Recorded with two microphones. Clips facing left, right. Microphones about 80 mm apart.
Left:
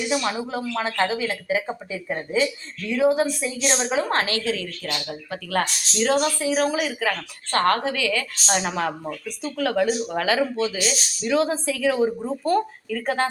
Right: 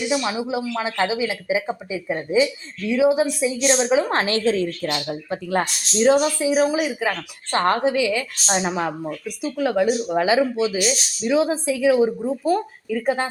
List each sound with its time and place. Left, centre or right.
0.1 s speech: centre
3.8 s speech: centre; by 4.9 s right
4.9 s speech: right